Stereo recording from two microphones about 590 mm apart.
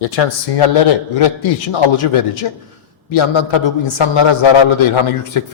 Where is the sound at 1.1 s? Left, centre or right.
Left.